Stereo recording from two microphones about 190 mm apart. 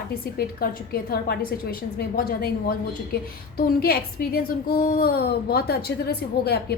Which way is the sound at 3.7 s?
55° left (ahead or behind).